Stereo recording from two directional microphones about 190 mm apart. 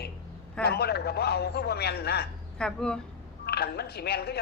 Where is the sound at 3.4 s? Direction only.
55° left (ahead or behind).